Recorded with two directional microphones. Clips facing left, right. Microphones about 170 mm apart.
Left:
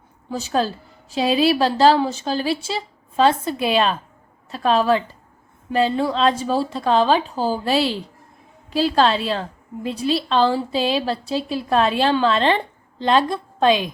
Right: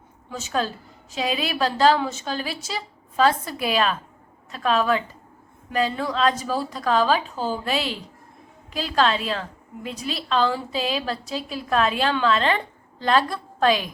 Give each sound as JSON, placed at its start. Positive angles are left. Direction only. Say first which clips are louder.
{"t": 0.3, "sound": "a woman's voice", "louder": "left 5 dB", "side_deg": 35}